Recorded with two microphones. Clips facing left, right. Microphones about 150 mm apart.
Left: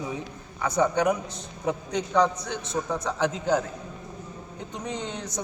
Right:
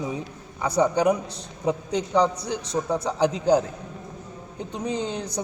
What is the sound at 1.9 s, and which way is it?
A man's voice, 30° right (ahead or behind).